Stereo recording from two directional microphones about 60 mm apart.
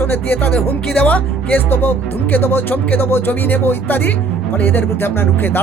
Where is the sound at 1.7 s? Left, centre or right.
Left.